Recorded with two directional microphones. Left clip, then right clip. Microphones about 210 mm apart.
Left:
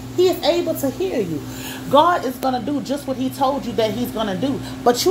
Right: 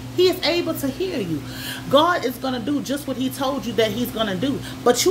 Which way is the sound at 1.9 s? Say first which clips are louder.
Left 2 dB; 20° right (ahead or behind).